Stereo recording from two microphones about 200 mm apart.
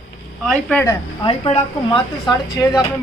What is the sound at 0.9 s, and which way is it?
A woman's voice, 30° left (ahead or behind).